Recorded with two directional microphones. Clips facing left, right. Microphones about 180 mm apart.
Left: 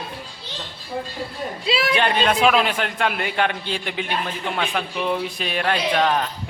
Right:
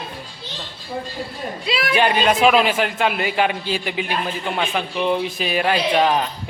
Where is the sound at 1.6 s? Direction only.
30° left (ahead or behind).